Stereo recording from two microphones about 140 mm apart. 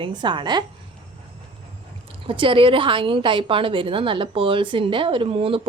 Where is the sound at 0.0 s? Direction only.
35° right (ahead or behind).